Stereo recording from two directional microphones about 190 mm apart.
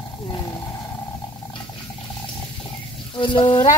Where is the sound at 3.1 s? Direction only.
25° left (ahead or behind).